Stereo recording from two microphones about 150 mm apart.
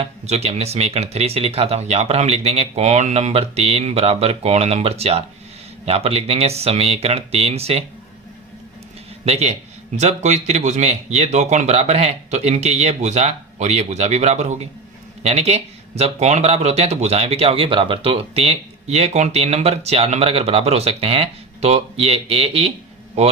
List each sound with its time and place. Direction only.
0.0 s speech: 45° right (ahead or behind)
9.2 s speech: 45° right (ahead or behind)